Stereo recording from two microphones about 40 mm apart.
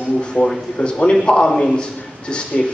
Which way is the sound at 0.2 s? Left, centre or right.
Left.